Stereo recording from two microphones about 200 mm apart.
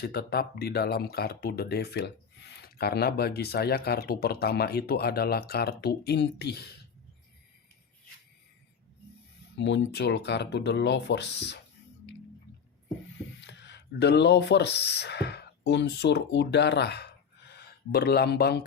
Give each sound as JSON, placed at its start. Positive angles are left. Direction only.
{"t": 0.0, "sound": "speech", "side_deg": 50}
{"t": 9.6, "sound": "speech", "side_deg": 65}
{"t": 13.4, "sound": "speech", "side_deg": 60}